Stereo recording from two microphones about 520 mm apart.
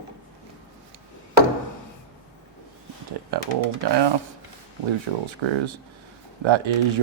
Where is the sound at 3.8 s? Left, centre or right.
Right.